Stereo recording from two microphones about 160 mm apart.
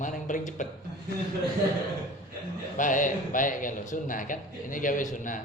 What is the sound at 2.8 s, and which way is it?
A man's voice, 55° left (ahead or behind).